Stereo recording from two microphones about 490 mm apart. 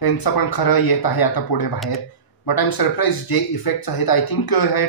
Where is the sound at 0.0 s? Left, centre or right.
Left.